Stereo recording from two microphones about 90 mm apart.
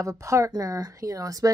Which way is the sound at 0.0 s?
35° right (ahead or behind).